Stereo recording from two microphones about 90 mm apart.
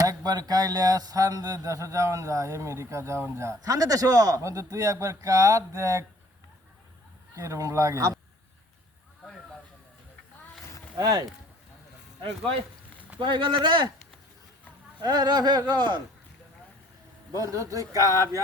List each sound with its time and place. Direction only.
0.0 s speech: 40° right (ahead or behind)
7.3 s speech: 35° right (ahead or behind)
10.9 s speech: 50° right (ahead or behind)
12.2 s speech: 85° right
13.1 s speech: 60° right (ahead or behind)
15.0 s speech: 50° right (ahead or behind)
17.3 s speech: 40° right (ahead or behind)